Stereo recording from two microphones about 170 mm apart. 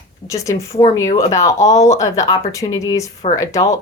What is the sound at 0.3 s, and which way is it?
A woman's voice, 20° left (ahead or behind).